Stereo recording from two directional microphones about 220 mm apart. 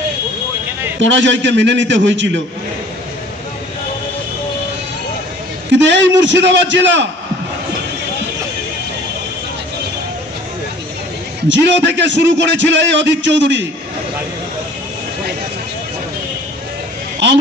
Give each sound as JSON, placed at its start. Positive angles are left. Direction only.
{"t": 1.0, "sound": "a man's voice", "side_deg": -55}
{"t": 5.7, "sound": "a man's voice", "side_deg": -55}
{"t": 11.4, "sound": "a man's voice", "side_deg": -55}